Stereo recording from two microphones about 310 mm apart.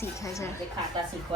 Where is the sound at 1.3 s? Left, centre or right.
Centre.